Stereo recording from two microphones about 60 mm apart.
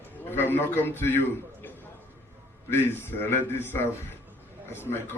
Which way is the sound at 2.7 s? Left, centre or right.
Left.